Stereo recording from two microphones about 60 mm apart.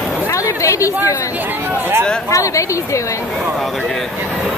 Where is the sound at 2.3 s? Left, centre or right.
Left.